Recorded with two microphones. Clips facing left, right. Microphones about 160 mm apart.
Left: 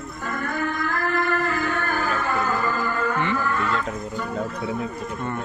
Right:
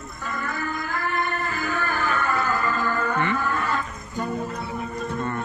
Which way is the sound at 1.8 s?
40° left (ahead or behind).